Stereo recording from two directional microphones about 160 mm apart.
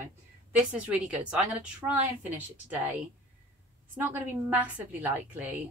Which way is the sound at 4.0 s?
10° right (ahead or behind).